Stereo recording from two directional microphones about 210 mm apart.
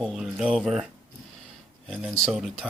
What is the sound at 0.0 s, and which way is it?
Speech, centre (ahead or behind).